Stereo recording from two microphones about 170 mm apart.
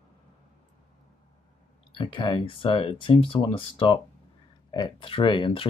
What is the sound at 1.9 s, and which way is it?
Speech, 30° left (ahead or behind).